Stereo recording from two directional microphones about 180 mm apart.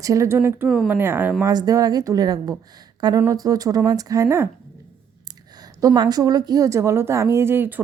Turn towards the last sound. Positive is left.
turn(degrees=-10)  # may be behind; listen again after turning